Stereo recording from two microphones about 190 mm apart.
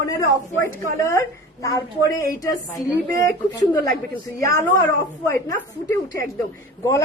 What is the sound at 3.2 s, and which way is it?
A woman's voice, 20° left (ahead or behind).